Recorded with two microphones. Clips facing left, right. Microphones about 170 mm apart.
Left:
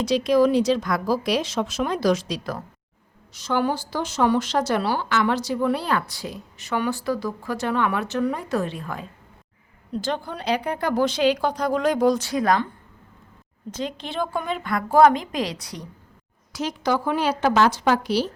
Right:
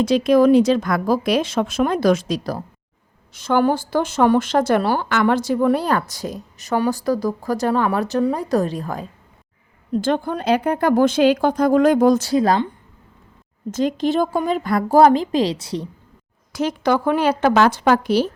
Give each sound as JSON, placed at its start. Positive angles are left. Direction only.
{"t": 0.0, "sound": "speech", "side_deg": -50}
{"t": 9.9, "sound": "speech", "side_deg": -50}
{"t": 12.3, "sound": "a woman's voice", "side_deg": -30}
{"t": 13.7, "sound": "speech", "side_deg": -45}
{"t": 16.5, "sound": "speech", "side_deg": -55}